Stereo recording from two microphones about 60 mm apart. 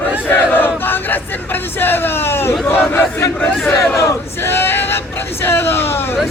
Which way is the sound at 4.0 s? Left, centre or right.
Left.